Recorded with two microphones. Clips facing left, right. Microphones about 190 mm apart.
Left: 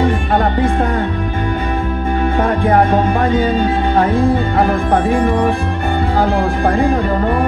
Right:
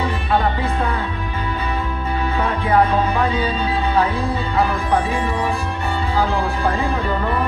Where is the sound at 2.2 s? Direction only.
50° left (ahead or behind).